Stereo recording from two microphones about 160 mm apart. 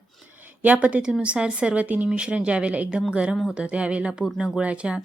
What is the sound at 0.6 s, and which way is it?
A woman's voice, 10° right (ahead or behind).